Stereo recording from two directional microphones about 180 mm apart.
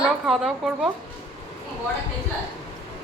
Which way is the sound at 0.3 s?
Centre (ahead or behind).